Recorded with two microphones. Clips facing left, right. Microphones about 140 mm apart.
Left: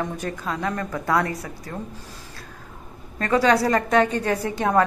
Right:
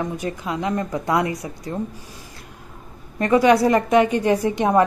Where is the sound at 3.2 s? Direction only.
15° right (ahead or behind).